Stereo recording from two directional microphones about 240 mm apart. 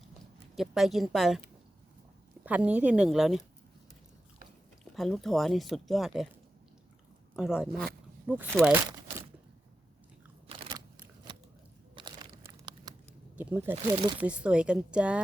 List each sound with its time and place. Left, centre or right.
0.5 s speech: centre
4.9 s speech: centre
7.3 s speech: centre
10.4 s a sound: centre
11.9 s crumpling: centre
13.3 s speech: centre